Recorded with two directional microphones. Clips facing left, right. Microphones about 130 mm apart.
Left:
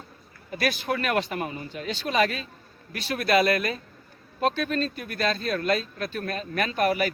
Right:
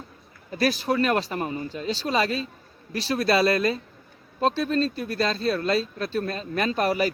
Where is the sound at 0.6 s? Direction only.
35° right (ahead or behind).